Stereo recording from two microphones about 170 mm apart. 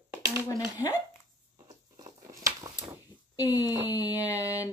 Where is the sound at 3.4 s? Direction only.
20° left (ahead or behind).